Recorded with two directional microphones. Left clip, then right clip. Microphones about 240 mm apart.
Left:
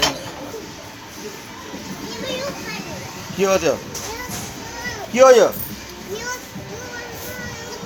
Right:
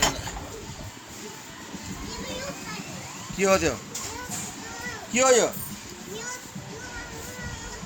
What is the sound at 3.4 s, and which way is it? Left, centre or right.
Speech, centre.